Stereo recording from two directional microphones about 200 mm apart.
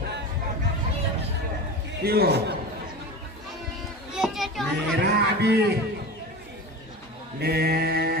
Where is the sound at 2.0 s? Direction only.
50° right (ahead or behind).